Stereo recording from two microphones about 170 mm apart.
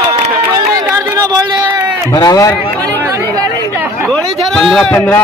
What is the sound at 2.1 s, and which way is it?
Speech, 20° left (ahead or behind).